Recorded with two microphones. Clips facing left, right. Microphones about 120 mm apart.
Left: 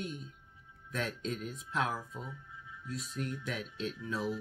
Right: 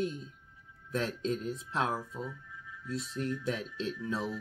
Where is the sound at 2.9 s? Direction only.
30° right (ahead or behind).